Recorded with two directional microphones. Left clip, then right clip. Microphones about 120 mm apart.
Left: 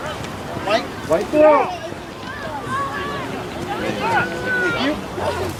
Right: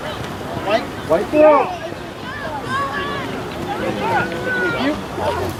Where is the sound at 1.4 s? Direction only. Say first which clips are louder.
Right 1 dB; 20° left (ahead or behind).